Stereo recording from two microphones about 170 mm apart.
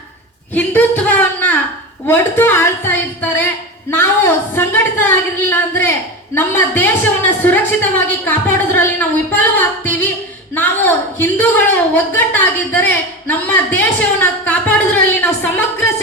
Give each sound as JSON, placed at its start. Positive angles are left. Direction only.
{"t": 0.5, "sound": "a sound", "side_deg": 10}
{"t": 2.0, "sound": "a woman's voice", "side_deg": 15}
{"t": 4.5, "sound": "a woman's voice", "side_deg": 10}